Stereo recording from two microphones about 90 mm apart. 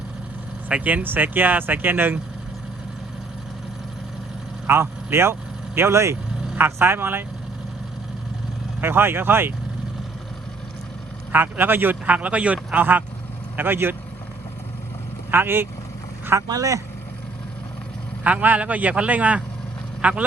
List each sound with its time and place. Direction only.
0.7 s speech: 15° right (ahead or behind)
4.6 s speech: 30° right (ahead or behind)
8.8 s speech: 25° right (ahead or behind)
11.3 s speech: 20° right (ahead or behind)
15.3 s speech: 25° right (ahead or behind)
16.5 s speech: 40° right (ahead or behind)
18.2 s a man's voice: 15° right (ahead or behind)